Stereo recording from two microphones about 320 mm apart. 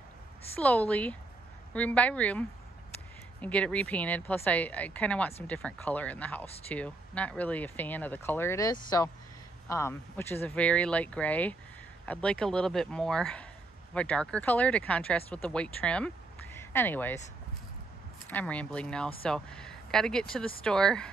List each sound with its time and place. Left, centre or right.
0.6 s speech: centre
18.2 s speech: centre